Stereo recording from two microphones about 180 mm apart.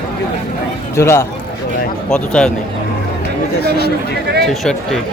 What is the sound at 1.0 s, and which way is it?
Speech, 15° left (ahead or behind).